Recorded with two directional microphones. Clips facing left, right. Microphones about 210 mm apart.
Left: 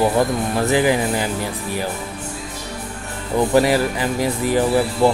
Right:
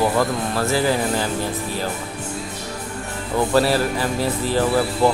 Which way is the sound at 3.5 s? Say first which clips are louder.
Left 2 dB; 15° left (ahead or behind).